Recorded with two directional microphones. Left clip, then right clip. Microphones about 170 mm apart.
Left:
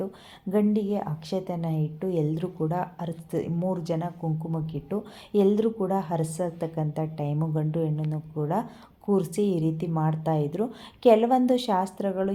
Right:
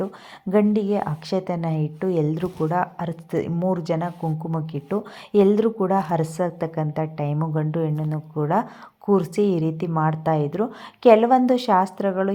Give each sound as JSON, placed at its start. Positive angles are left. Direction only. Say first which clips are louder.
{"t": 0.5, "sound": "a woman's voice", "louder": "right 6 dB", "side_deg": -25}